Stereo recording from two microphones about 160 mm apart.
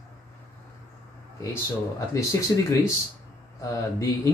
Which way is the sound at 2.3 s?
20° left (ahead or behind).